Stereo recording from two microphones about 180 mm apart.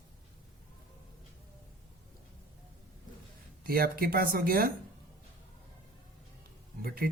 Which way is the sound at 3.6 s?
55° right (ahead or behind).